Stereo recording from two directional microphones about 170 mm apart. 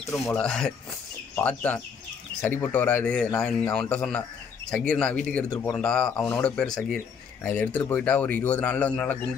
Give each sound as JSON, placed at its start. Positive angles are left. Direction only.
{"t": 0.1, "sound": "speech", "side_deg": 5}
{"t": 5.5, "sound": "speech", "side_deg": 20}
{"t": 5.8, "sound": "speech", "side_deg": 5}